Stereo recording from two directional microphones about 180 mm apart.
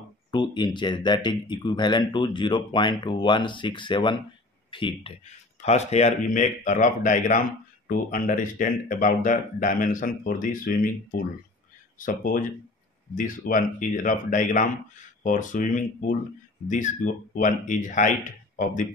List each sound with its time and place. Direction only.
0.3 s a man's voice: 25° left (ahead or behind)
5.2 s speech: 40° left (ahead or behind)
13.5 s speech: 45° left (ahead or behind)